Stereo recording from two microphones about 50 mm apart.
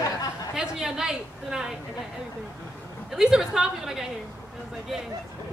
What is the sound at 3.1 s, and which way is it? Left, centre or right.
Speech, centre.